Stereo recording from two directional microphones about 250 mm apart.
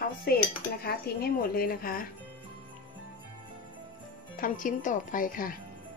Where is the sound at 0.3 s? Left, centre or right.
Left.